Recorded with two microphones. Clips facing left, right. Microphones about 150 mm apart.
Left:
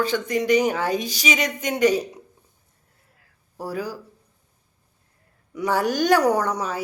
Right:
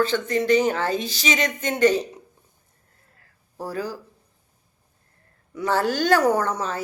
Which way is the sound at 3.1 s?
10° left (ahead or behind).